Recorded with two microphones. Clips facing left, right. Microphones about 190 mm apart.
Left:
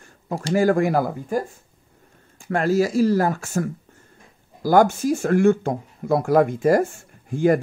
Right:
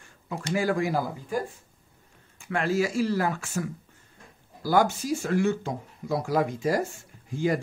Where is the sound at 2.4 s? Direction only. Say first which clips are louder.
Left 6 dB; 40° left (ahead or behind).